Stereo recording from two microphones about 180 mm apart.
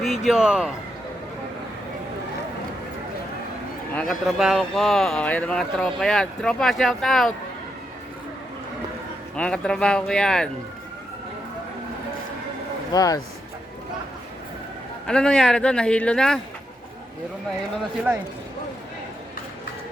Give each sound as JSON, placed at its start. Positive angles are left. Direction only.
{"t": 0.0, "sound": "a man's voice", "side_deg": 0}
{"t": 3.9, "sound": "speech", "side_deg": 0}
{"t": 9.3, "sound": "speech", "side_deg": 5}
{"t": 12.9, "sound": "speech", "side_deg": 20}
{"t": 15.0, "sound": "speech", "side_deg": 5}